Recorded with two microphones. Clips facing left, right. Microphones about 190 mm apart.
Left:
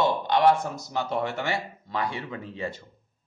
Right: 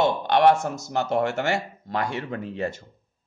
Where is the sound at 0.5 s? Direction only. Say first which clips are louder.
Right 3 dB; 45° right (ahead or behind).